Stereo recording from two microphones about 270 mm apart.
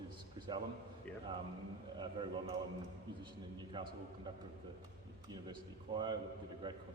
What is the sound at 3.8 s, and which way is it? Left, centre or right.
Speech, centre.